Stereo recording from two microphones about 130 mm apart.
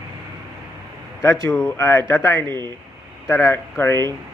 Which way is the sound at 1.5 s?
15° left (ahead or behind).